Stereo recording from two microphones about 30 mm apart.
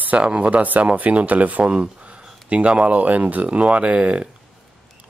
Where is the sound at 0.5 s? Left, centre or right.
Right.